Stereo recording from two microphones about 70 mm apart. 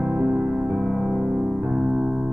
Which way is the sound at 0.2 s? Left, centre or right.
Right.